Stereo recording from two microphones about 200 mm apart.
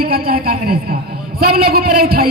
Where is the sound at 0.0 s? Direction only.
50° right (ahead or behind).